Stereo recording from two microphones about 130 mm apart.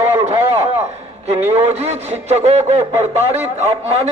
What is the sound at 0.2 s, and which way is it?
A man's voice, 55° right (ahead or behind).